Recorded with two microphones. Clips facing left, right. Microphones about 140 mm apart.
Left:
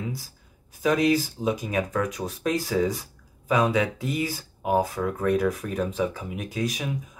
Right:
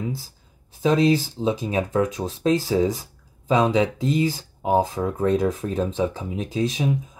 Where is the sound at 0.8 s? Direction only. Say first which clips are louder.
Right 3 dB; 25° right (ahead or behind).